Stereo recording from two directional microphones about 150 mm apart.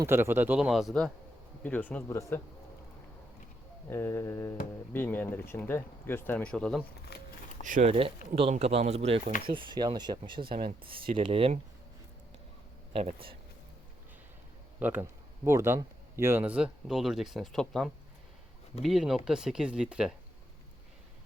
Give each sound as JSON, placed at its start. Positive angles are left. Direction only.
{"t": 0.0, "sound": "speech", "side_deg": -15}
{"t": 3.8, "sound": "speech", "side_deg": 15}
{"t": 7.1, "sound": "a sound", "side_deg": 90}
{"t": 7.6, "sound": "speech", "side_deg": -50}
{"t": 12.9, "sound": "speech", "side_deg": -40}
{"t": 14.8, "sound": "speech", "side_deg": -15}